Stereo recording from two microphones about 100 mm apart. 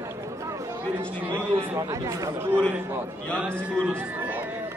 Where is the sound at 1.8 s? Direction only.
30° right (ahead or behind).